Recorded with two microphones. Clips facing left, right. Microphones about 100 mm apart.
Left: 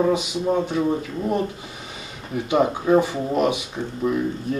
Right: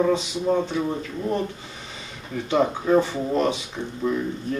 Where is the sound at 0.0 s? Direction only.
15° left (ahead or behind).